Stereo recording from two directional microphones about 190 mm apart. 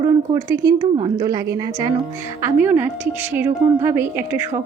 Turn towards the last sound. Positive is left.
turn(degrees=-10)  # may be behind; listen again after turning